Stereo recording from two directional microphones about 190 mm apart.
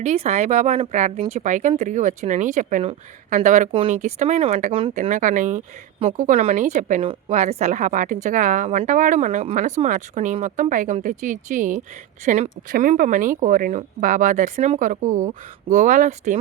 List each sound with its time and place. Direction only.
0.0 s speech: 35° right (ahead or behind)
7.0 s speech: 30° right (ahead or behind)